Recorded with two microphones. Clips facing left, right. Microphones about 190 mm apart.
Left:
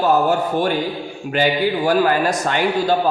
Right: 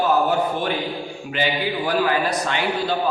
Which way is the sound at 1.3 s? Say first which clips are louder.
Left 6 dB; 45° left (ahead or behind).